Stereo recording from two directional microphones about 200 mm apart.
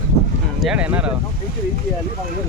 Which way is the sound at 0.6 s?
5° right (ahead or behind).